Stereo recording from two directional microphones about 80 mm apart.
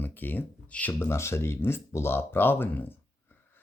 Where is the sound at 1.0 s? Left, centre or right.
Left.